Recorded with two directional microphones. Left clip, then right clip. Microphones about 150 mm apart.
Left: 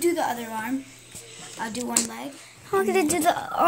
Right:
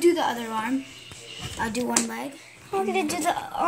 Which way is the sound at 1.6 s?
25° right (ahead or behind).